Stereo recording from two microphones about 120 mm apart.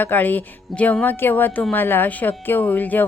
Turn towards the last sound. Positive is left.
turn(degrees=15)  # may be behind; listen again after turning